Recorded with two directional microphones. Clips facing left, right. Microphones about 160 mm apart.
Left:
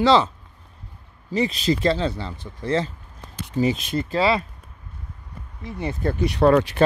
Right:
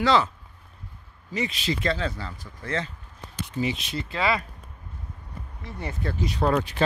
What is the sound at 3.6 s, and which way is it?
Speech, 50° left (ahead or behind).